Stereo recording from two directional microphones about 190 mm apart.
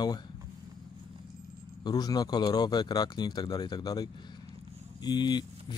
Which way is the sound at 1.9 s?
20° left (ahead or behind).